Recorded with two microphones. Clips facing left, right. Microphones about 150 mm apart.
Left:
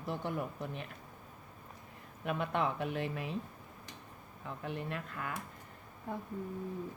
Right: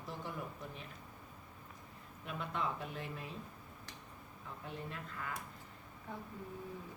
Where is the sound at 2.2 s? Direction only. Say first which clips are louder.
Left 6 dB; 65° left (ahead or behind).